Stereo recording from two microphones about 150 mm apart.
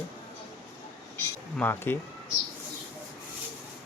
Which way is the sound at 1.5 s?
15° left (ahead or behind).